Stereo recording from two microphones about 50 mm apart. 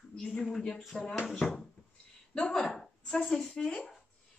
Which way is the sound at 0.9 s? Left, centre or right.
Centre.